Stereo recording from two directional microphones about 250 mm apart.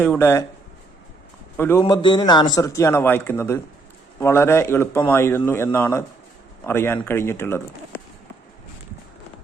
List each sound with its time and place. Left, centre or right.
0.0 s a man's voice: centre
1.5 s a man's voice: centre
1.8 s a man's voice: centre